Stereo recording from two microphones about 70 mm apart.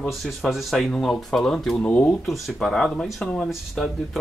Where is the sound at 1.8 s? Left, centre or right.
Centre.